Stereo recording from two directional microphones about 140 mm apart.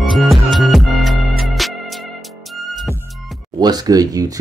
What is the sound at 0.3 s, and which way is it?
Music, centre (ahead or behind).